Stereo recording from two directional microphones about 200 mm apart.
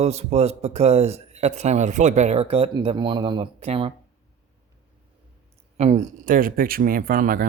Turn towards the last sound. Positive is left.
turn(degrees=-45)  # may be behind; listen again after turning